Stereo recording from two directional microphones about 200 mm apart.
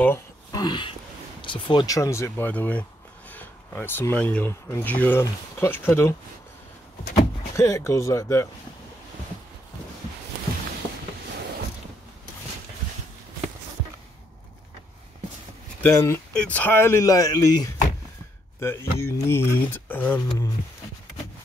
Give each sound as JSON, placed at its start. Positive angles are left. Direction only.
{"t": 0.0, "sound": "a sound", "side_deg": 15}
{"t": 1.4, "sound": "speech", "side_deg": 25}
{"t": 7.5, "sound": "speech", "side_deg": 15}
{"t": 15.8, "sound": "speech", "side_deg": 15}